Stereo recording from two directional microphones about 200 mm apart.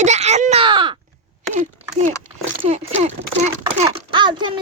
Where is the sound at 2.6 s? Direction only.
35° right (ahead or behind).